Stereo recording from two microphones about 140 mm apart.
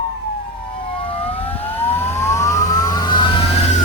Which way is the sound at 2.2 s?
20° left (ahead or behind).